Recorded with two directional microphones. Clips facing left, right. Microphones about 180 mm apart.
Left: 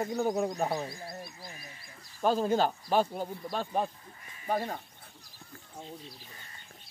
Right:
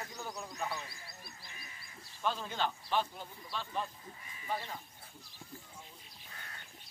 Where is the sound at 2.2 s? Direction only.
40° left (ahead or behind).